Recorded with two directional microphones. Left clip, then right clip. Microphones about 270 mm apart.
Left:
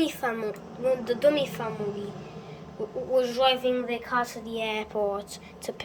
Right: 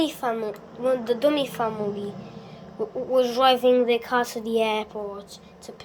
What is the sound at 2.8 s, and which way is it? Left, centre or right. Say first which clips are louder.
A woman's voice: right 3 dB; centre.